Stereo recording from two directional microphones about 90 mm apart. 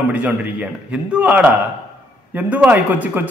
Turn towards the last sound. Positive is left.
turn(degrees=-20)  # may be behind; listen again after turning